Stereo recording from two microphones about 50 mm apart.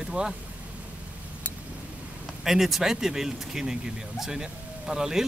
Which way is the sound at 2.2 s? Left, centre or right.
Centre.